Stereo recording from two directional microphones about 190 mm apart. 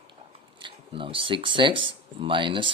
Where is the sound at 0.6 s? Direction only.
25° right (ahead or behind).